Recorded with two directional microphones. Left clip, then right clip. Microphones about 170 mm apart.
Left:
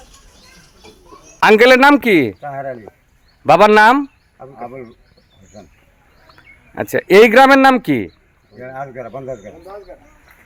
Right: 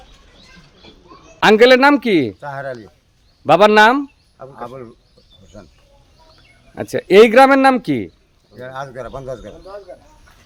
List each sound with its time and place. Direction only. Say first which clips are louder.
1.4 s speech: left 1 dB; 5° right (ahead or behind)
2.4 s speech: left 1 dB; 20° right (ahead or behind)
3.4 s speech: left 1 dB; centre (ahead or behind)
6.9 s speech: left 1 dB; 5° right (ahead or behind)
8.5 s speech: even; 15° right (ahead or behind)